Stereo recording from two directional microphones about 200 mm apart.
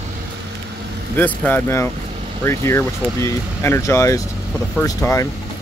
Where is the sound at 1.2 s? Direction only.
10° left (ahead or behind).